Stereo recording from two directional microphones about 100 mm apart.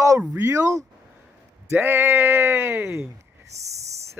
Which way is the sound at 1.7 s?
20° right (ahead or behind).